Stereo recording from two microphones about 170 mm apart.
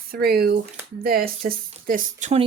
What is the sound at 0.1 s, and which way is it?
Speech, 65° right (ahead or behind).